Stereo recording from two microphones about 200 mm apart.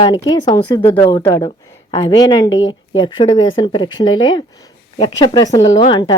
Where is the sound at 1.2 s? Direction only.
15° left (ahead or behind).